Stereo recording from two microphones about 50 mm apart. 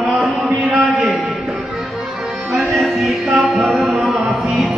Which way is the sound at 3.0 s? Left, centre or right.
Centre.